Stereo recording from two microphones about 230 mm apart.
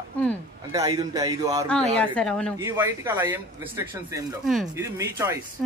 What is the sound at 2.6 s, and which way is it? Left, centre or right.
Speech, centre.